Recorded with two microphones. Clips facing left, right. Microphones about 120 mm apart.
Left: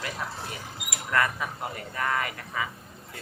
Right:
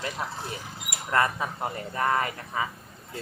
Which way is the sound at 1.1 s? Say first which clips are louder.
Right 2 dB; 30° right (ahead or behind).